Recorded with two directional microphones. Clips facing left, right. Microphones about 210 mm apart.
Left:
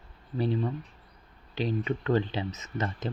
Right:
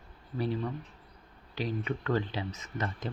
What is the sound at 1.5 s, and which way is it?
Speech, 25° left (ahead or behind).